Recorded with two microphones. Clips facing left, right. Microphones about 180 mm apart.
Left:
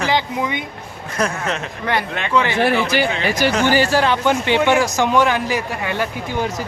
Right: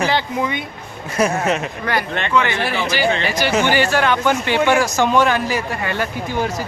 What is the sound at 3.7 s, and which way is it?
A man's voice, 35° left (ahead or behind).